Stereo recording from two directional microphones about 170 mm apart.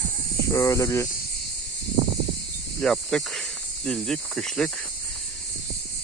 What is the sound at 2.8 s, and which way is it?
Cricket, centre (ahead or behind).